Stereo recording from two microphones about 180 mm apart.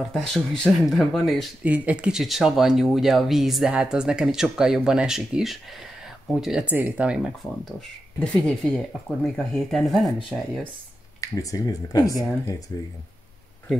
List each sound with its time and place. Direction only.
0.1 s speech: centre (ahead or behind)
11.1 s speech: 20° left (ahead or behind)